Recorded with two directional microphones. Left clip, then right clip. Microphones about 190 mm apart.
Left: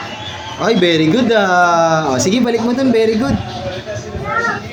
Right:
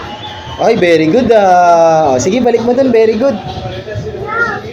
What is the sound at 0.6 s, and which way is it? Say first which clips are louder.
Speech: right 5 dB; 20° left (ahead or behind).